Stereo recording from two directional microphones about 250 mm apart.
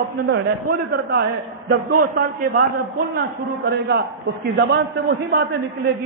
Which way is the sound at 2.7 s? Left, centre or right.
Right.